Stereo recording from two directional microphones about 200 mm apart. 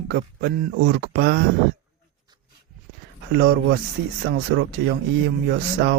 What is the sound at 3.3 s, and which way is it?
Speech, 55° right (ahead or behind).